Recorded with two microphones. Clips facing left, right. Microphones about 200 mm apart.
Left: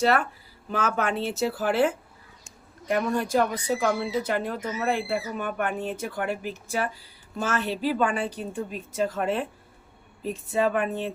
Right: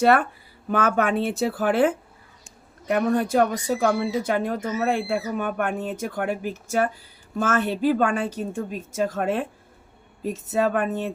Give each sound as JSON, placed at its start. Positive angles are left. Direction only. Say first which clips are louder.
{"t": 0.7, "sound": "speech", "louder": "right 5 dB", "side_deg": -60}